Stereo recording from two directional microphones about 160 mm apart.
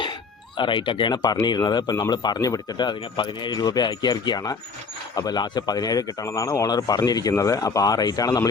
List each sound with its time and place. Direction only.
0.0 s speech: 30° left (ahead or behind)